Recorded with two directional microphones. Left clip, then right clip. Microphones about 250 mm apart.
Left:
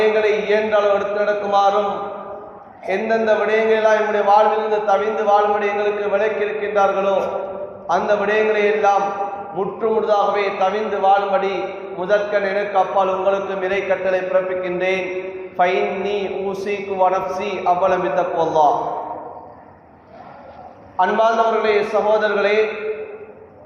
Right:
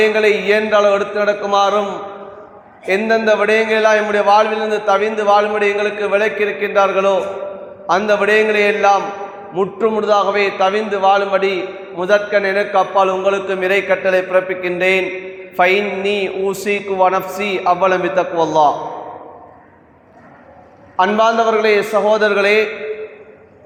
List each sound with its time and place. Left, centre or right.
0.0 s a man's voice: right
2.8 s a man's voice: right
20.9 s a man's voice: right